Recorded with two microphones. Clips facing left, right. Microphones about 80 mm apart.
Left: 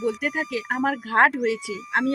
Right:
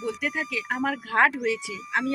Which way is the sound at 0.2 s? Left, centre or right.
Left.